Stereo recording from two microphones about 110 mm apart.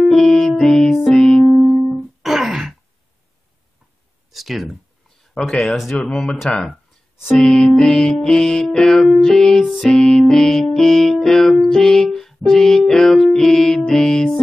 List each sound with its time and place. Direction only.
0.0 s music: centre (ahead or behind)
4.3 s a sound: centre (ahead or behind)
5.3 s music: 5° left (ahead or behind)